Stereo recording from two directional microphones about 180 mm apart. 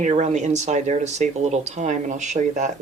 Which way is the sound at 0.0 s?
40° right (ahead or behind).